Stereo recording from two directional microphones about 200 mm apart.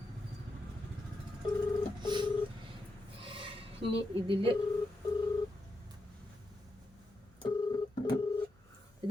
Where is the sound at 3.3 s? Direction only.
25° right (ahead or behind).